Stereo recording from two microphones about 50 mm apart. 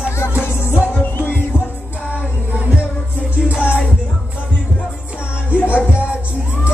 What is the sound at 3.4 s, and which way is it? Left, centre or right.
Music, right.